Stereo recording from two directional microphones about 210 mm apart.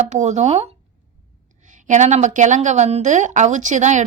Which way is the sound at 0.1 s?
35° right (ahead or behind).